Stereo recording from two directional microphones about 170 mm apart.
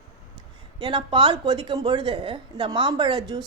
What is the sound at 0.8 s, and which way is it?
Speech, 30° right (ahead or behind).